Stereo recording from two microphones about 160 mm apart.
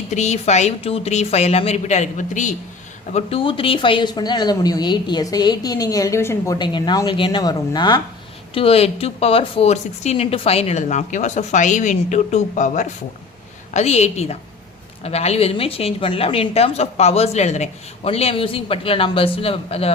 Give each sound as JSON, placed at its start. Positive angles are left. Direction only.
{"t": 0.1, "sound": "speech", "side_deg": 45}
{"t": 3.1, "sound": "a woman's voice", "side_deg": 40}